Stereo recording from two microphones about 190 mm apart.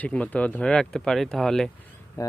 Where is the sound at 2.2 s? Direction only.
15° left (ahead or behind).